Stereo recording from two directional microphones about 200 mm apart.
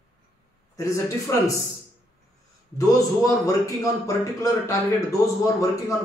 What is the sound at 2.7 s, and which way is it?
A man's voice, 15° left (ahead or behind).